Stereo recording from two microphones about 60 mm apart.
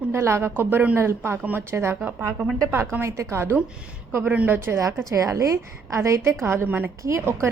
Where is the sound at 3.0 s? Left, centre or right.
Right.